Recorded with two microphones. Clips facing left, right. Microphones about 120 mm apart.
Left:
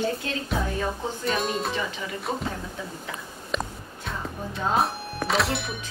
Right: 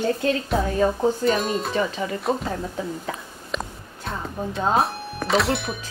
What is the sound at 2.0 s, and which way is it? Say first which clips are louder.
Speech: right 7 dB; 40° right (ahead or behind).